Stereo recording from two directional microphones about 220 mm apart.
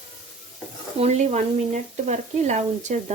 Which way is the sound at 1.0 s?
30° right (ahead or behind).